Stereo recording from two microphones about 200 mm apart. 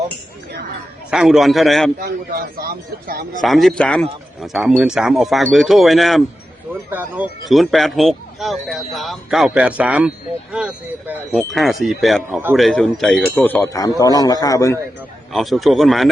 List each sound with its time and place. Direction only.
1.1 s speech: 5° right (ahead or behind)
2.0 s speech: 45° right (ahead or behind)
3.4 s speech: centre (ahead or behind)
15.3 s speech: centre (ahead or behind)